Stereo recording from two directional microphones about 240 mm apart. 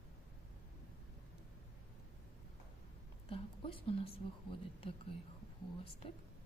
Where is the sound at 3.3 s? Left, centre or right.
Left.